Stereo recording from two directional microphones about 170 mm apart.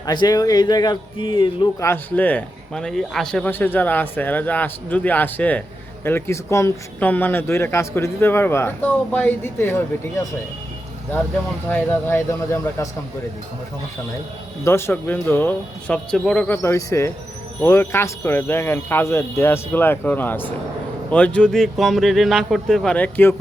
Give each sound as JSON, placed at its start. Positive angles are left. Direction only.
{"t": 0.0, "sound": "speech", "side_deg": 25}
{"t": 1.8, "sound": "speech", "side_deg": 10}
{"t": 11.7, "sound": "speech", "side_deg": 10}
{"t": 14.6, "sound": "speech", "side_deg": 15}
{"t": 16.6, "sound": "speech", "side_deg": 15}